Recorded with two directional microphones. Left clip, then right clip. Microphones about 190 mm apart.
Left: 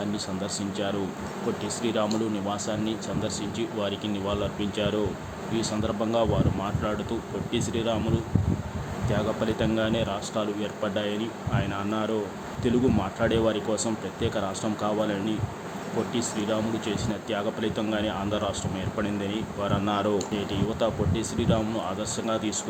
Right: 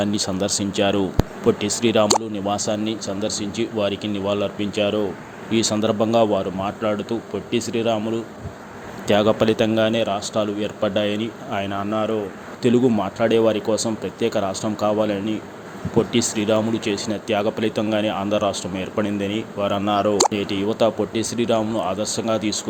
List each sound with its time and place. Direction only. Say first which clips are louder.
0.0 s speech: right 9 dB; 35° right (ahead or behind); by 5.0 s 20° right (ahead or behind)
5.5 s speech: right 9 dB; 35° right (ahead or behind)
9.0 s speech: right 11 dB; 40° right (ahead or behind); by 11.8 s 25° right (ahead or behind)
11.9 s speech: right 7 dB; 10° right (ahead or behind)
12.6 s speech: right 7 dB; 25° right (ahead or behind)
16.1 s speech: right 7 dB; 35° right (ahead or behind); by 20.1 s 15° right (ahead or behind)
20.3 s speech: right 6 dB; 30° right (ahead or behind)